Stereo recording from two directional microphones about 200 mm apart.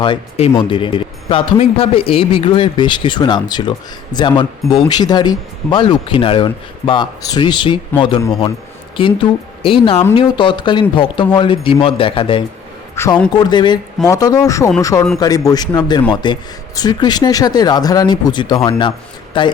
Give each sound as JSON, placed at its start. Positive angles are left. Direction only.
{"t": 0.0, "sound": "speech", "side_deg": 30}
{"t": 13.0, "sound": "a man's voice", "side_deg": 10}
{"t": 13.3, "sound": "a man's voice", "side_deg": 20}